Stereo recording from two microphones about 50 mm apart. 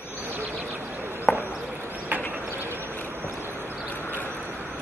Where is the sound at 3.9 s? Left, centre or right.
Left.